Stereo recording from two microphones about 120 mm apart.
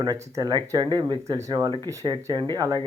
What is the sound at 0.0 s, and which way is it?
Speech, 30° right (ahead or behind).